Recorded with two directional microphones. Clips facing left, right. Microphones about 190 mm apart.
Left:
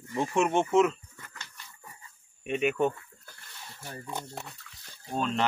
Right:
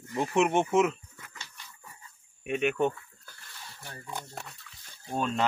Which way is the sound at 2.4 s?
Centre (ahead or behind).